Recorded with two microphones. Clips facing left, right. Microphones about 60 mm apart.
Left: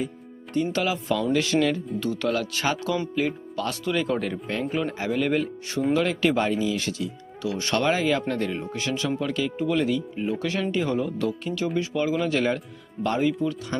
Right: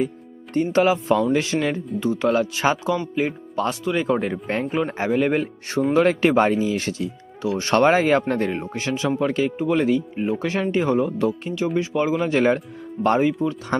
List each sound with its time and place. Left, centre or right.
0.5 s speech: right
10.9 s speech: centre; by 13.2 s right
13.2 s speech: right